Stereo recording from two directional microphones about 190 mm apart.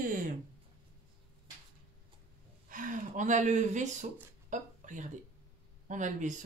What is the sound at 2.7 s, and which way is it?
Gasp, 45° right (ahead or behind).